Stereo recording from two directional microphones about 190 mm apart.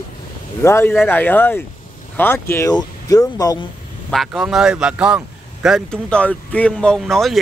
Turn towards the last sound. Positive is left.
turn(degrees=0)  # may be behind; listen again after turning